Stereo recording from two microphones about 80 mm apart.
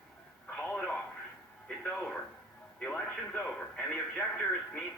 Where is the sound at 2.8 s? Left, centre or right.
Centre.